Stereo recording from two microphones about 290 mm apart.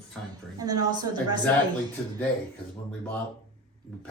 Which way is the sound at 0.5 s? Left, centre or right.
Centre.